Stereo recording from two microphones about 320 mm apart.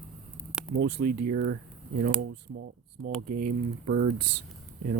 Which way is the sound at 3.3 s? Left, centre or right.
Right.